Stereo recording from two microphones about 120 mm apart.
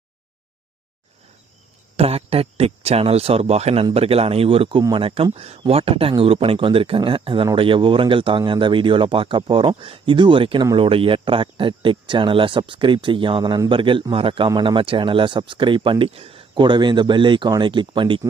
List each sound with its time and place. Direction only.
2.0 s a man's voice: 55° right (ahead or behind)
4.8 s speech: 35° right (ahead or behind)
5.0 s a man's voice: 50° right (ahead or behind)